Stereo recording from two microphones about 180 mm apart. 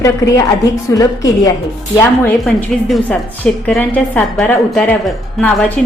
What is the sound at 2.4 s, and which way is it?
A woman's voice, 5° left (ahead or behind).